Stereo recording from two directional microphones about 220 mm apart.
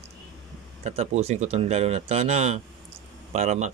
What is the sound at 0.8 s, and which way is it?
A man's voice, 30° right (ahead or behind).